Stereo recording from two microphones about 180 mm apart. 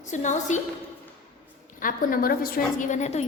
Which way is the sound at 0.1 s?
40° left (ahead or behind).